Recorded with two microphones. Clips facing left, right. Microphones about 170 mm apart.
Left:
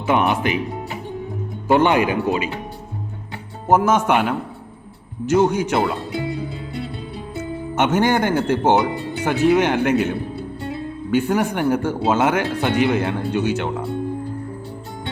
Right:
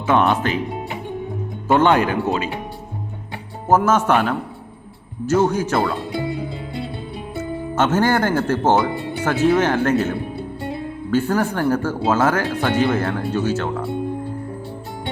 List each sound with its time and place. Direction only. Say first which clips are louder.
0.0 s speech: right 1 dB; 15° left (ahead or behind)
1.6 s speech: even; 15° left (ahead or behind)
3.7 s speech: even; 15° left (ahead or behind)
7.3 s speech: right 1 dB; 15° left (ahead or behind)
11.1 s speech: even; 15° left (ahead or behind)